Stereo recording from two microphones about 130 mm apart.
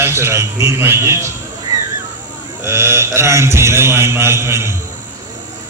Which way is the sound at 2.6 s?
20° right (ahead or behind).